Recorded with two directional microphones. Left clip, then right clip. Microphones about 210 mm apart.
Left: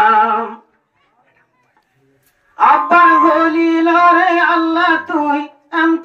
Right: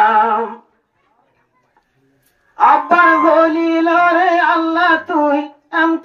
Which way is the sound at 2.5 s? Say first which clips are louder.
Left 1 dB; 40° right (ahead or behind).